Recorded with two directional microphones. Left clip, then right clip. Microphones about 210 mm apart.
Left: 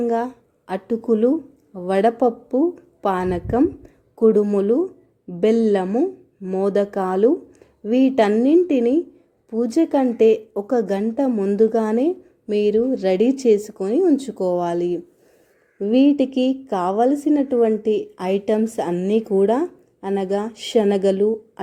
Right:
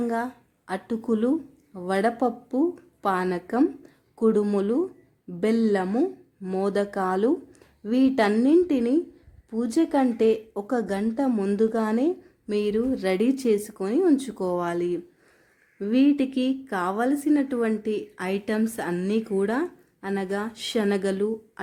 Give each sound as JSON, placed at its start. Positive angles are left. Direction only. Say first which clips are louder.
{"t": 0.0, "sound": "speech", "louder": "left 6 dB", "side_deg": 5}
{"t": 16.0, "sound": "speech", "louder": "left 5 dB", "side_deg": 5}